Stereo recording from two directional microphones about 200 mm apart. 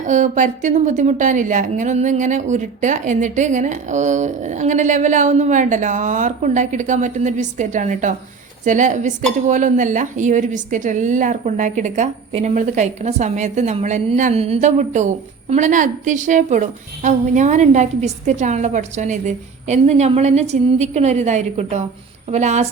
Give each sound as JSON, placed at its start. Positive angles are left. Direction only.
{"t": 0.0, "sound": "a woman's voice", "side_deg": -40}